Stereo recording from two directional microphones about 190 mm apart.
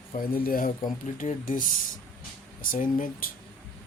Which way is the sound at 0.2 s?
50° left (ahead or behind).